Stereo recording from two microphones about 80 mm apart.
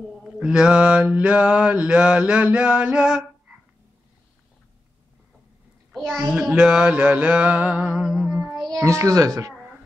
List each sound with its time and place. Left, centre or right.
0.2 s mantra: centre
5.9 s a child's voice: centre
6.5 s mantra: centre
8.3 s child singing: centre
8.7 s a child's voice: right